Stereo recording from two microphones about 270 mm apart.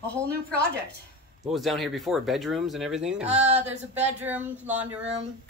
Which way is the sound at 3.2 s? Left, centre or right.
Right.